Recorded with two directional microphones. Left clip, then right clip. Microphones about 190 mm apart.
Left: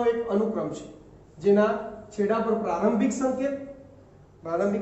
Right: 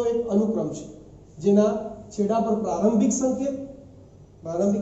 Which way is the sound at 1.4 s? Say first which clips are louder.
Even; 5° left (ahead or behind).